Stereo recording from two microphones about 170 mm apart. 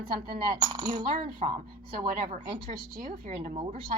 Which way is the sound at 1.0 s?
55° right (ahead or behind).